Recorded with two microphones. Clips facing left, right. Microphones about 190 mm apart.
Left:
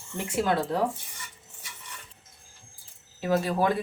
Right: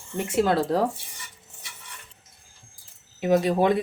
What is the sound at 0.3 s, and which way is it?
Speech, 35° right (ahead or behind).